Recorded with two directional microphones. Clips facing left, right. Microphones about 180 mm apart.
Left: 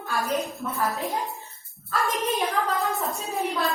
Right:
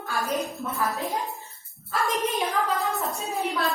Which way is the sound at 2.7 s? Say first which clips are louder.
Left 1 dB; centre (ahead or behind).